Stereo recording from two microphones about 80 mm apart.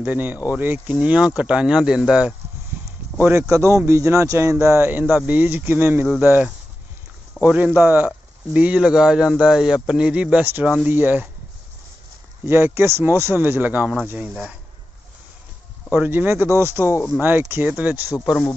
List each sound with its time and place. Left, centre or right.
0.0 s speech: right
3.3 s speech: right
8.5 s speech: centre
12.4 s speech: right
14.3 s speech: centre
15.9 s speech: right